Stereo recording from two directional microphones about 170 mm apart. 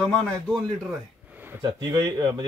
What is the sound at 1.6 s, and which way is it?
Speech, 25° right (ahead or behind).